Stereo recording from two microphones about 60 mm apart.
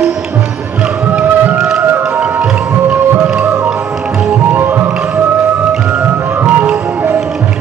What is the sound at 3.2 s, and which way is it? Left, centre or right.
Music, centre.